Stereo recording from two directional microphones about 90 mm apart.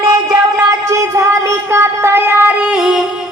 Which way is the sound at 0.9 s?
35° right (ahead or behind).